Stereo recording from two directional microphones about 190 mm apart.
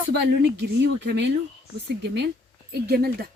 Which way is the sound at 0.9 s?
65° right (ahead or behind).